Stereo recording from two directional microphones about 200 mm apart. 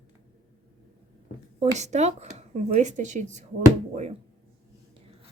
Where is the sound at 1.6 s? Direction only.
35° right (ahead or behind).